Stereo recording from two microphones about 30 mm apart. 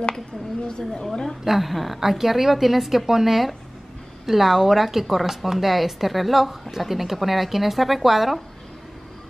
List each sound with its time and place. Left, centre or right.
0.7 s a woman's voice: left
1.4 s speech: centre